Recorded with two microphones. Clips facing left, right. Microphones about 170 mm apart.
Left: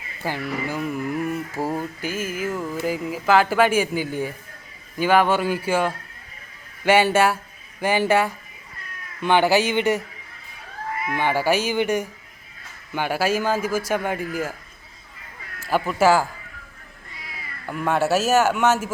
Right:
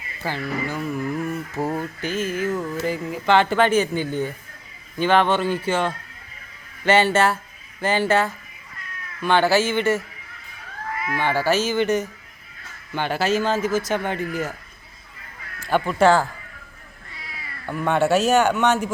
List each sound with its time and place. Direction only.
0.2 s speech: 15° left (ahead or behind)
11.0 s speech: 20° left (ahead or behind)
15.6 s a man's voice: 5° left (ahead or behind)
17.7 s a man's voice: 5° left (ahead or behind)